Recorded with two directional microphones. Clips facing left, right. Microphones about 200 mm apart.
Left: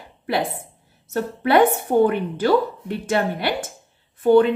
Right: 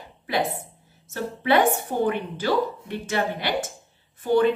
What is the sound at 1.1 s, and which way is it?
A woman's voice, 60° left (ahead or behind).